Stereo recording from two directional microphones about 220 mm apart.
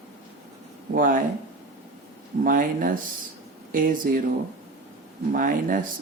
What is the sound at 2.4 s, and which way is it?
Speech, 40° right (ahead or behind).